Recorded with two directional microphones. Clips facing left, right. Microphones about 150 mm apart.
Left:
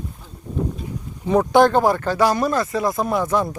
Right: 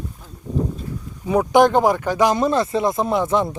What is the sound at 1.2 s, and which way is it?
A man's voice, 5° right (ahead or behind).